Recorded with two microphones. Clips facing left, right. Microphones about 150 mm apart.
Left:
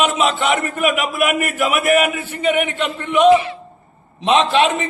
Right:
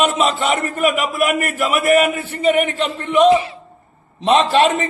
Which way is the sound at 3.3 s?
30° right (ahead or behind).